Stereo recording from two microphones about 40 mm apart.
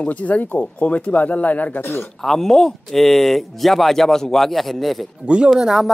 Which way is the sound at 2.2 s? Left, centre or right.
Centre.